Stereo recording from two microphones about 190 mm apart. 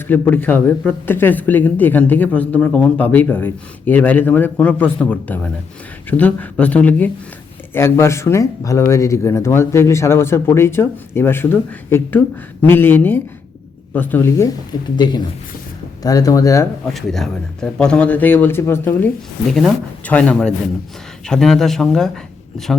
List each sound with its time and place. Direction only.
0.1 s speech: 10° left (ahead or behind)
16.8 s speech: centre (ahead or behind)